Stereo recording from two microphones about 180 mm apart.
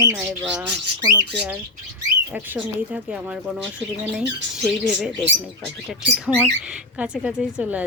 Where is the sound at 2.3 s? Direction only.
5° right (ahead or behind).